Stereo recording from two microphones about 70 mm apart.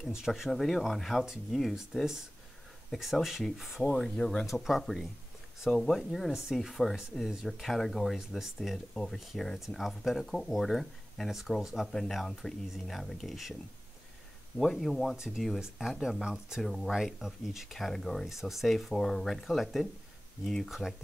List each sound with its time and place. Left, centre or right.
0.1 s speech: centre
4.5 s speech: centre
14.6 s speech: centre